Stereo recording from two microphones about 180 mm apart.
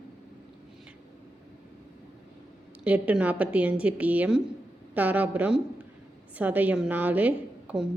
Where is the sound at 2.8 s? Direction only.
10° right (ahead or behind).